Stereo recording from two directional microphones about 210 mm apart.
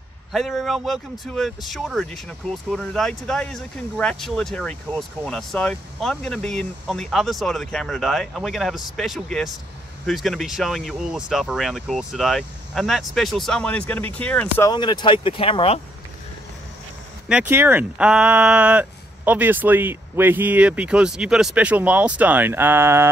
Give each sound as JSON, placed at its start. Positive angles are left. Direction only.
{"t": 0.3, "sound": "speech", "side_deg": 0}
{"t": 14.7, "sound": "speech", "side_deg": 20}
{"t": 17.3, "sound": "speech", "side_deg": -10}